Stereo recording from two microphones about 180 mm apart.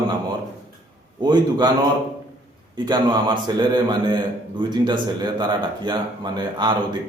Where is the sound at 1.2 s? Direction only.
25° right (ahead or behind).